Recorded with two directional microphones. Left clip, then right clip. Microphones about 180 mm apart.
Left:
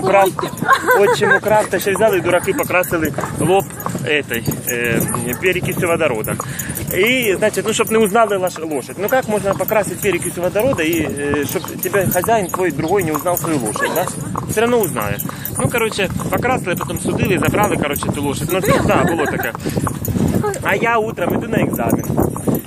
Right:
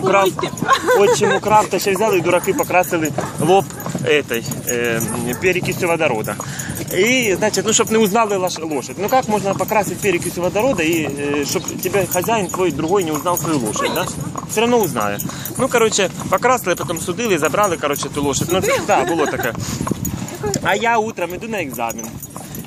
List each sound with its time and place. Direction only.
0.4 s speech: 10° left (ahead or behind)
1.4 s speech: 15° right (ahead or behind)
3.0 s speech: 25° right (ahead or behind)
14.5 s speech: 15° right (ahead or behind)
14.8 s speech: 25° right (ahead or behind)
18.6 s speech: 15° right (ahead or behind)
20.6 s speech: 15° right (ahead or behind)